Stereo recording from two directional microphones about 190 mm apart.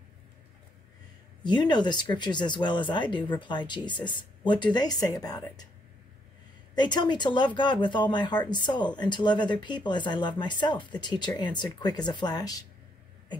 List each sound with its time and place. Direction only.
1.4 s speech: 25° left (ahead or behind)
6.7 s speech: 20° left (ahead or behind)